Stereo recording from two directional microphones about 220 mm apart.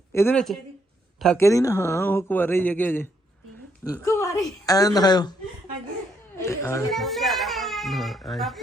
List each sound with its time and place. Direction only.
0.1 s speech: 10° left (ahead or behind)
6.3 s speech: 15° left (ahead or behind)
6.9 s a child's voice: centre (ahead or behind)